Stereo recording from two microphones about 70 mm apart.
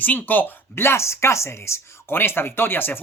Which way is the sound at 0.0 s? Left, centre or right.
Left.